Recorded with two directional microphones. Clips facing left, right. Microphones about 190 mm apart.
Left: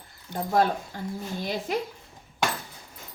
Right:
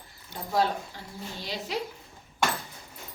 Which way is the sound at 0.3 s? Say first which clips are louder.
Left 3 dB; 50° left (ahead or behind).